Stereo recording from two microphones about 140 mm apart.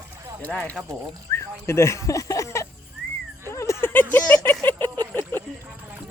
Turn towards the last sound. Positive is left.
turn(degrees=15)  # may be behind; listen again after turning